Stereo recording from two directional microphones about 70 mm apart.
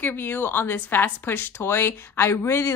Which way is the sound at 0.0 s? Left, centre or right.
Left.